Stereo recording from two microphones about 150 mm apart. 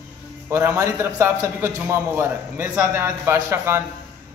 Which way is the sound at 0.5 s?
20° right (ahead or behind).